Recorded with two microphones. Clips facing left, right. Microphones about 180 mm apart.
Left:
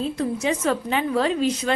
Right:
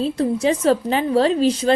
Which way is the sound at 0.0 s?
35° right (ahead or behind).